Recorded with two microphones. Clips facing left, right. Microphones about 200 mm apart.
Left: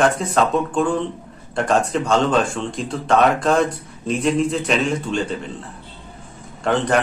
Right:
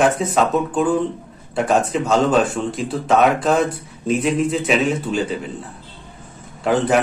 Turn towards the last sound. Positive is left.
turn(degrees=-5)  # may be behind; listen again after turning